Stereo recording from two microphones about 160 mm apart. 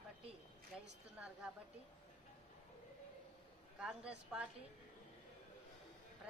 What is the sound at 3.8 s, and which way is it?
Speech, 5° right (ahead or behind).